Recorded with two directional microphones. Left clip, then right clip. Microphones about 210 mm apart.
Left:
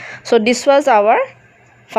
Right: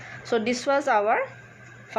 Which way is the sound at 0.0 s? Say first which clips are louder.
Left 12 dB; 40° left (ahead or behind).